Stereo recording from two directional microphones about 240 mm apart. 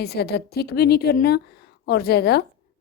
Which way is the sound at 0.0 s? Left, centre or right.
Left.